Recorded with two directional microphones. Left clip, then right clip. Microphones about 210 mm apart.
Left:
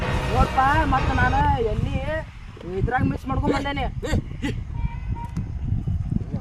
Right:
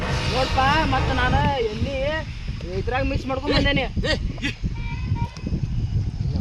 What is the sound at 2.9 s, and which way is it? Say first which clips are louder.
Speech: right 1 dB; 15° left (ahead or behind).